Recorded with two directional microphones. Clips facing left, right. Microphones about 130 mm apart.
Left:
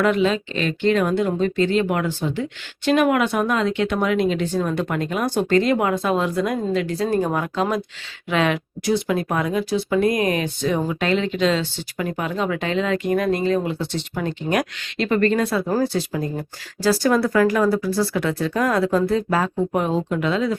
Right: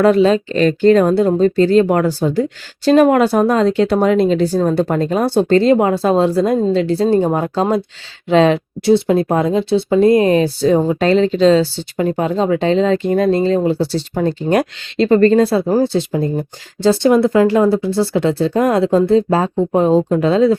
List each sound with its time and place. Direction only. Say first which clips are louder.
0.0 s a woman's voice: right 7 dB; 35° right (ahead or behind)